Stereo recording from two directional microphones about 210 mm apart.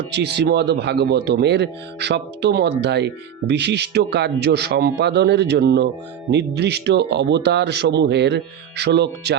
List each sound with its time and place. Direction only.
0.1 s speech: 55° right (ahead or behind)